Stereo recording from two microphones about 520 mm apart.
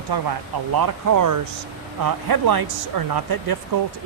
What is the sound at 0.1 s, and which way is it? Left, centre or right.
Speech, right.